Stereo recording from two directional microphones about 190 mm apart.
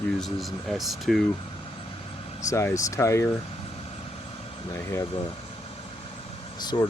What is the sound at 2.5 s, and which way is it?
Speech, 15° left (ahead or behind).